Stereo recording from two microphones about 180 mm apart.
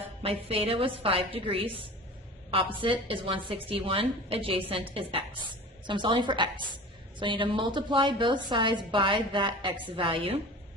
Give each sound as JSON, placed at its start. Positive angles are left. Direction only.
{"t": 0.2, "sound": "a woman's voice", "side_deg": -30}